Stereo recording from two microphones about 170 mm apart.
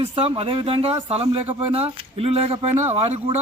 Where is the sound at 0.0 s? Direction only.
35° right (ahead or behind).